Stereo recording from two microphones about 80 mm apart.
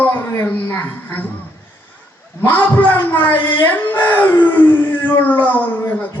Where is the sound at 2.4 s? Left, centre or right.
Left.